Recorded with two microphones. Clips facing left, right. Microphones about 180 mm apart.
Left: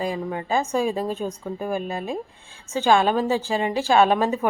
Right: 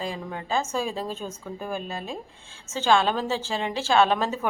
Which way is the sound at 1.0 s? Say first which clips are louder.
Left 6 dB; 50° left (ahead or behind).